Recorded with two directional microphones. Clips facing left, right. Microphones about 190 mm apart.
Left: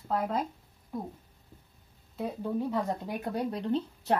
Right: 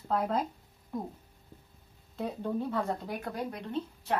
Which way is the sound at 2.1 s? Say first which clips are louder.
Left 1 dB; 5° left (ahead or behind).